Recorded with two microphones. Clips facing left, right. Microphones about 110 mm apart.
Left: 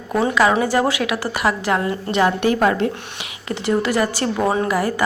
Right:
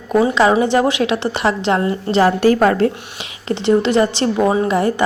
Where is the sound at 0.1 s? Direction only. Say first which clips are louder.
Right 3 dB; 20° right (ahead or behind); by 2.9 s 40° right (ahead or behind).